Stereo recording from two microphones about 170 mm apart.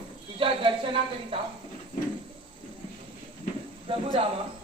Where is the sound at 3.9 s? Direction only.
30° right (ahead or behind).